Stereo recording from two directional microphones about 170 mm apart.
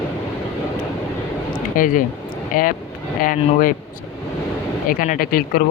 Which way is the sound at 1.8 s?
50° left (ahead or behind).